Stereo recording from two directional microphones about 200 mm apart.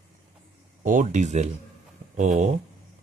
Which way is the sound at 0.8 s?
40° right (ahead or behind).